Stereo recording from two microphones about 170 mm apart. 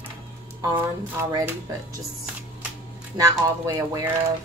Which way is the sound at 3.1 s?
20° right (ahead or behind).